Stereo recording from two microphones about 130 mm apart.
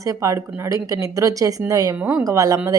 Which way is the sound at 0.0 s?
25° right (ahead or behind).